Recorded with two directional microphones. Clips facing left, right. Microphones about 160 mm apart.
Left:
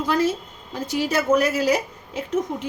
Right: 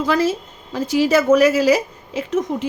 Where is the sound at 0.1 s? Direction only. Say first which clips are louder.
Right 1 dB; 90° right.